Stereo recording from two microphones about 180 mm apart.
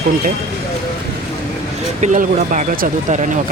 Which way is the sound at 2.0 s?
45° right (ahead or behind).